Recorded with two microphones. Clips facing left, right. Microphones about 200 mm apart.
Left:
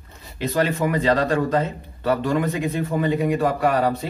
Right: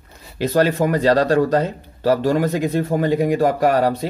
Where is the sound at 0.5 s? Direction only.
35° right (ahead or behind).